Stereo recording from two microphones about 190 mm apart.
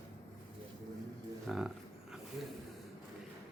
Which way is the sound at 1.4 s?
5° right (ahead or behind).